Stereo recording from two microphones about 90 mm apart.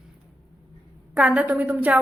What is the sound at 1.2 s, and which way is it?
Speech, 15° right (ahead or behind).